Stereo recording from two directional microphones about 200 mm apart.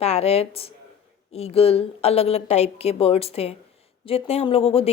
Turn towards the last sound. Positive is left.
turn(degrees=30)  # may be behind; listen again after turning